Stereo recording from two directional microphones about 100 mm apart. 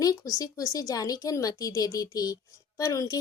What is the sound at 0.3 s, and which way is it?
Speech, 35° left (ahead or behind).